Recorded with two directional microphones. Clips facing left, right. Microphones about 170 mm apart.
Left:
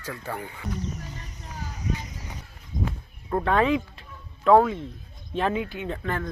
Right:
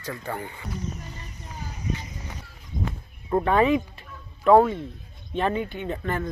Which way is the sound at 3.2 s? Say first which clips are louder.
Right 2 dB; 5° right (ahead or behind).